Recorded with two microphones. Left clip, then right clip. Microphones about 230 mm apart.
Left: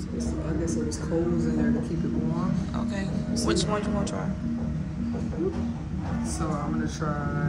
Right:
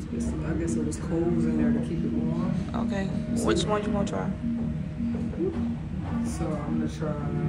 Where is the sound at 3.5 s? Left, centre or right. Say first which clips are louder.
Right 2 dB; centre.